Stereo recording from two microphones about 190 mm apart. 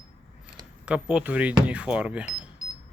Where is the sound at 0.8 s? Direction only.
5° right (ahead or behind).